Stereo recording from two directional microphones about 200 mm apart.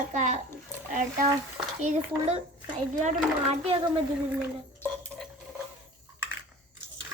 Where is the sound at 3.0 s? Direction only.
35° right (ahead or behind).